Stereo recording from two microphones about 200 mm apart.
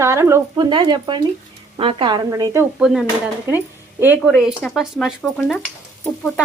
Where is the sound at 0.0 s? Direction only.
15° right (ahead or behind).